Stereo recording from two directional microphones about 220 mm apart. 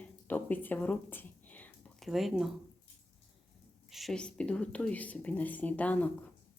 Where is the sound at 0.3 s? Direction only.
10° left (ahead or behind).